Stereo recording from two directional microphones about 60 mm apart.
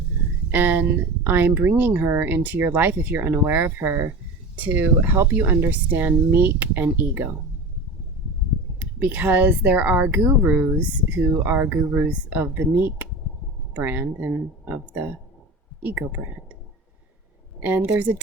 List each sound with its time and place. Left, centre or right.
0.5 s speech: right
4.5 s speech: right
8.8 s speech: right
11.4 s speech: right
17.6 s speech: right